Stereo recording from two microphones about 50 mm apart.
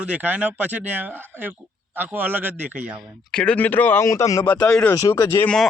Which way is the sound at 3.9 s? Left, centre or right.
Left.